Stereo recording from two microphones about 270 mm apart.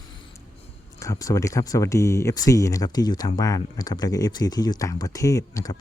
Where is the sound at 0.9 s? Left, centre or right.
Centre.